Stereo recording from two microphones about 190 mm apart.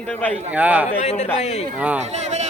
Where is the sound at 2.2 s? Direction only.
35° right (ahead or behind).